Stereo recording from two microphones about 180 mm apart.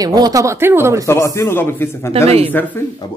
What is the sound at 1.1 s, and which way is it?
Speech, 15° left (ahead or behind).